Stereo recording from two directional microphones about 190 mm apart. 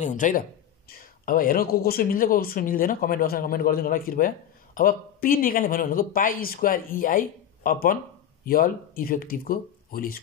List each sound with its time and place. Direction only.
0.0 s speech: 45° left (ahead or behind)